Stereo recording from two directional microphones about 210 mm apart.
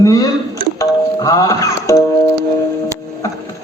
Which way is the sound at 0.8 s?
15° left (ahead or behind).